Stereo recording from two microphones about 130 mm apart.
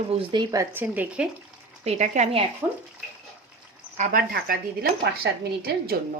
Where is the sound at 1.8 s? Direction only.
60° right (ahead or behind).